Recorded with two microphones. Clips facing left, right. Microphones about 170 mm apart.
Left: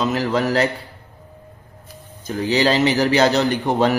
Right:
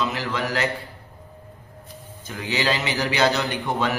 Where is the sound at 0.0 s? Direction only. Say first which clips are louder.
Left 7 dB; 40° left (ahead or behind).